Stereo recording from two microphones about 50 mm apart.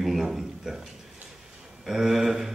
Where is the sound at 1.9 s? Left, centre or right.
Centre.